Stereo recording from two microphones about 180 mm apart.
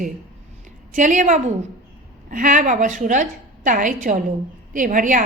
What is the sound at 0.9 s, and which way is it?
A woman's voice, 45° right (ahead or behind).